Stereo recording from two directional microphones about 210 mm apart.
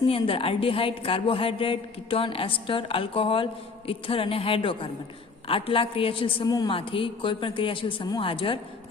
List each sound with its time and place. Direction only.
0.1 s a woman's voice: 25° left (ahead or behind)